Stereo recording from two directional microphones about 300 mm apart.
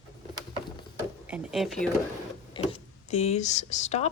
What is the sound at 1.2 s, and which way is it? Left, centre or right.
Speech, centre.